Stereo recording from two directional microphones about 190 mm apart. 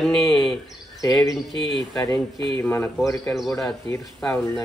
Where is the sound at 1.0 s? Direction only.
20° left (ahead or behind).